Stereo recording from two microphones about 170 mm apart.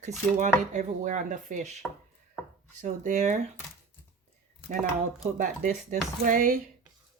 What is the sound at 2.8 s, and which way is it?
Speech, 50° right (ahead or behind).